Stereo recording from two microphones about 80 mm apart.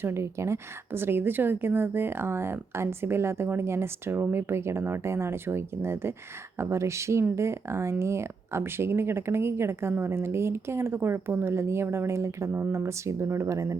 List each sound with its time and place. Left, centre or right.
0.0 s a woman's voice: right